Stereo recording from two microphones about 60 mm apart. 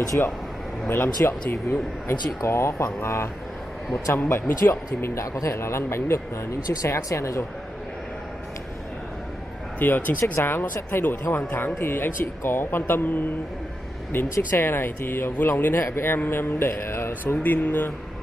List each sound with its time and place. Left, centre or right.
0.2 s speech: left
4.3 s speech: left
9.8 s speech: left
17.4 s speech: left